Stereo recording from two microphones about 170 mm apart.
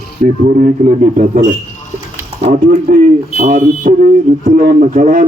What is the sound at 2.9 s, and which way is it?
A man's voice, 55° right (ahead or behind).